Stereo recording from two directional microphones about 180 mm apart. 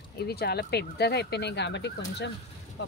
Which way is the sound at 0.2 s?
60° left (ahead or behind).